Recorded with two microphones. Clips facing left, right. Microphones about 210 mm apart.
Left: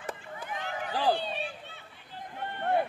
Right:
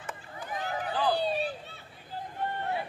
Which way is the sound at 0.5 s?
40° right (ahead or behind).